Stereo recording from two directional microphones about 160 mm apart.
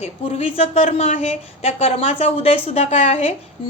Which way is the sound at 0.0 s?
40° left (ahead or behind).